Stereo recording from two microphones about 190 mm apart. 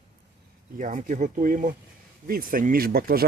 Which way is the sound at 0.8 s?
40° right (ahead or behind).